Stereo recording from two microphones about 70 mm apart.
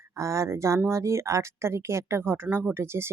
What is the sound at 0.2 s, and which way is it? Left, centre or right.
Speech, right.